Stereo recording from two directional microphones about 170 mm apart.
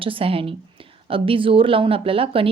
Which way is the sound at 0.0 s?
30° right (ahead or behind).